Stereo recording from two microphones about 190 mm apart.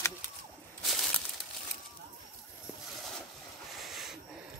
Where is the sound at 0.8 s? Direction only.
Centre (ahead or behind).